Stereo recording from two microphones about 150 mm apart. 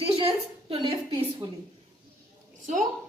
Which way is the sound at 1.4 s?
30° right (ahead or behind).